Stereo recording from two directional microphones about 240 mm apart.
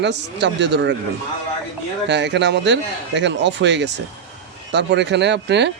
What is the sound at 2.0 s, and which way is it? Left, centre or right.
Speech, right.